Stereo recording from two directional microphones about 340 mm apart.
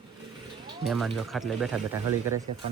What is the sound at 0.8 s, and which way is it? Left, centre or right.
Speech, centre.